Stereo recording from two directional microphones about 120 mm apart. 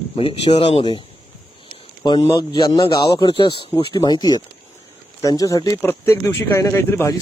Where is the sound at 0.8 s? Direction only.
40° left (ahead or behind).